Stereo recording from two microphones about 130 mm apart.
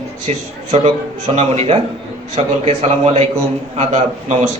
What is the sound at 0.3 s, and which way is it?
Speech, 60° right (ahead or behind).